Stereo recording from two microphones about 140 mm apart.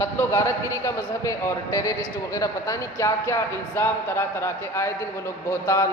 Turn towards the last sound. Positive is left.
turn(degrees=20)  # may be behind; listen again after turning